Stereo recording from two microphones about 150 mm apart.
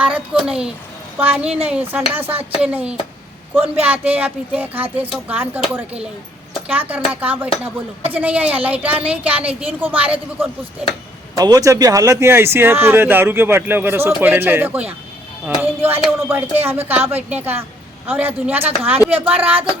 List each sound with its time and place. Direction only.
0.0 s a child's voice: 5° right (ahead or behind)
6.7 s speech: 10° right (ahead or behind)
11.3 s speech: 25° right (ahead or behind)